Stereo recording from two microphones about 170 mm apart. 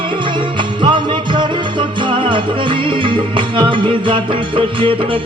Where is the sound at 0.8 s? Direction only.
30° right (ahead or behind).